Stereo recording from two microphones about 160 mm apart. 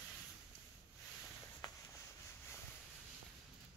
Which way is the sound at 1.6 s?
30° left (ahead or behind).